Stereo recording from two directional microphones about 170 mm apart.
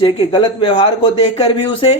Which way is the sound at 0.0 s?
30° left (ahead or behind).